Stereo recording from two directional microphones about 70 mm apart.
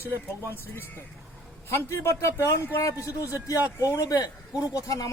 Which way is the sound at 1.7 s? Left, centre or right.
Left.